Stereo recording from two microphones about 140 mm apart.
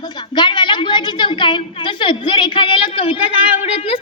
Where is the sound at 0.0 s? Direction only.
30° left (ahead or behind).